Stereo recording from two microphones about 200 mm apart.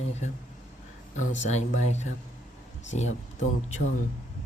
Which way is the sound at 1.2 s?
35° left (ahead or behind).